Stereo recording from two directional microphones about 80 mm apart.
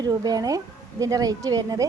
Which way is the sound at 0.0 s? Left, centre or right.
Right.